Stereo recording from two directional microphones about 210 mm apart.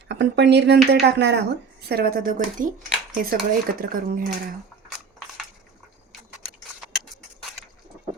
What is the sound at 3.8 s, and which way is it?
Speech, 45° right (ahead or behind).